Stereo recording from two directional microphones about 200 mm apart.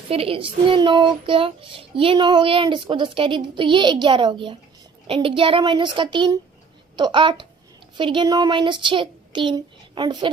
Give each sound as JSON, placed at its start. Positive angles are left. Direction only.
{"t": 0.1, "sound": "a child's voice", "side_deg": -30}